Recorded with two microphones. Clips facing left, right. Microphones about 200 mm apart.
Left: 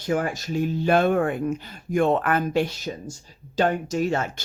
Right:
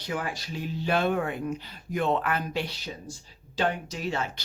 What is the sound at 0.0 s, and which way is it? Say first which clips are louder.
Speech: left 8 dB; 45° left (ahead or behind).